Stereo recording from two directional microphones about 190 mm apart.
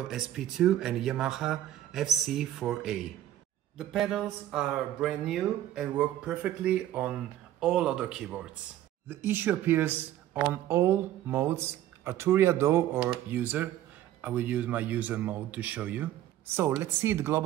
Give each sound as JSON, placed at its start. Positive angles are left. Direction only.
{"t": 0.1, "sound": "speech", "side_deg": 0}